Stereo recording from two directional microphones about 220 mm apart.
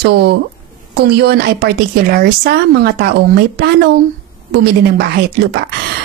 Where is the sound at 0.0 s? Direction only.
50° right (ahead or behind).